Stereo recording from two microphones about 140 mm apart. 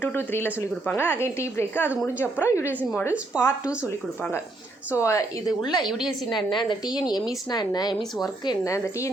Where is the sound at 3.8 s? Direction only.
15° left (ahead or behind).